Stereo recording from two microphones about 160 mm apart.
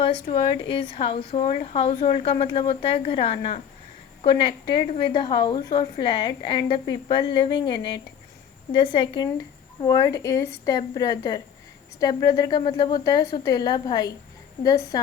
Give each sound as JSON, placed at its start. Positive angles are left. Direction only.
{"t": 0.3, "sound": "a woman's voice", "side_deg": 35}